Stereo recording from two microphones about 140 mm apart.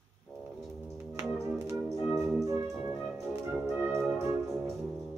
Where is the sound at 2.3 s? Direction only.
20° right (ahead or behind).